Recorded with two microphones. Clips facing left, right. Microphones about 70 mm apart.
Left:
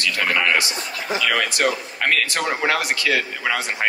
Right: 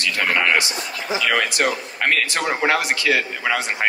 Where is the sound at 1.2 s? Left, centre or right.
Right.